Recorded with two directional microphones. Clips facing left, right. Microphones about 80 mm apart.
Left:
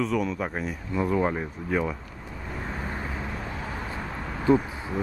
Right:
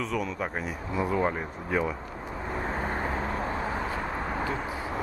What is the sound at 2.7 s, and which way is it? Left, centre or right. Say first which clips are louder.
Vehicle: right 3 dB; right.